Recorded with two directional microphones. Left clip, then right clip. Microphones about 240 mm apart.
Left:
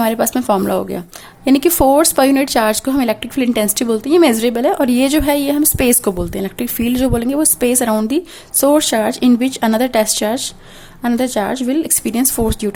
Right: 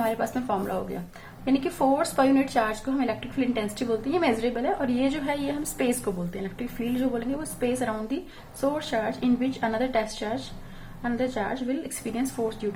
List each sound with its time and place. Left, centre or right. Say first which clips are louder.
0.0 s speech: left 11 dB; left